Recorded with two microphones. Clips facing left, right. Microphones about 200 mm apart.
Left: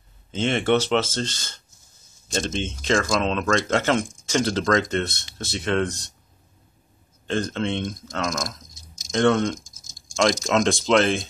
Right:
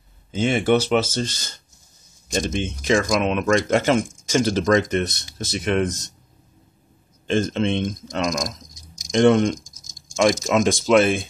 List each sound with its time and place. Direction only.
0.3 s speech: 10° right (ahead or behind)
7.2 s speech: 20° right (ahead or behind)